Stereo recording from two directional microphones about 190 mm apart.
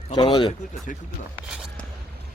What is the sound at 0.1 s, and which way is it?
Speech, 25° left (ahead or behind).